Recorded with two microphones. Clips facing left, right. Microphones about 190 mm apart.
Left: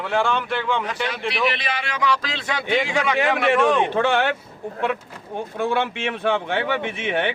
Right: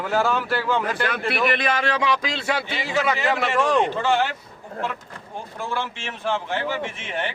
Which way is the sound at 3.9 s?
60° left (ahead or behind).